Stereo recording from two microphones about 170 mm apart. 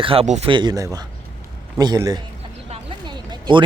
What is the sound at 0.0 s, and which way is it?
Speech, 35° right (ahead or behind).